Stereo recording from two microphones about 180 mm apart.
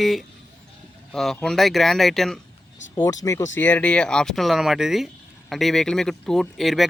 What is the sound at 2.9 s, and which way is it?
Speech, 15° left (ahead or behind).